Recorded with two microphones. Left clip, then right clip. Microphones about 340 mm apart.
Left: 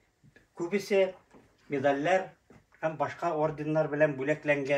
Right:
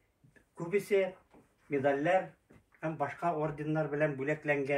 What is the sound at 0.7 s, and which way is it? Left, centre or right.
Speech, left.